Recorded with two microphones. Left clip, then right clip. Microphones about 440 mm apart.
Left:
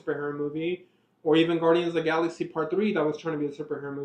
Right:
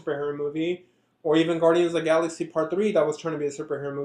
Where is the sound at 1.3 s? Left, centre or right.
Right.